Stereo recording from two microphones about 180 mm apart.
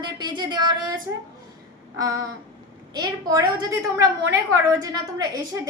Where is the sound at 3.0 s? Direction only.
20° right (ahead or behind).